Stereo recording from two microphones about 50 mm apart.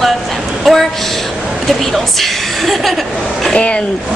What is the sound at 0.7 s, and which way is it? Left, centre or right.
Speech, centre.